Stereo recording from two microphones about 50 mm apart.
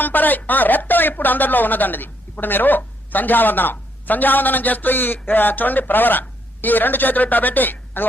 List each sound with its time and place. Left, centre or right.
0.0 s speech: left